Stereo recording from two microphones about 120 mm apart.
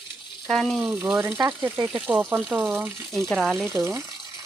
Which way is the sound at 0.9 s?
10° right (ahead or behind).